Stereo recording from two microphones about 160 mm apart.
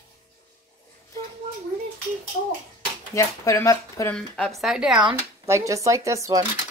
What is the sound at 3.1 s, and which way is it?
Speech, 20° left (ahead or behind).